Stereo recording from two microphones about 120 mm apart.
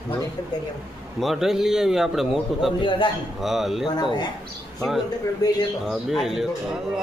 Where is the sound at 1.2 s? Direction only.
Centre (ahead or behind).